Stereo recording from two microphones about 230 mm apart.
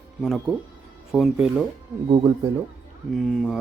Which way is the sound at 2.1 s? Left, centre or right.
Right.